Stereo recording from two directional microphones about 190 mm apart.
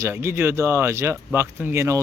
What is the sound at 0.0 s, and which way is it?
Speech, 10° right (ahead or behind).